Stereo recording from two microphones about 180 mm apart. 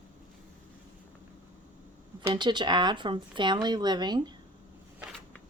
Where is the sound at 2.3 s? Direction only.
25° right (ahead or behind).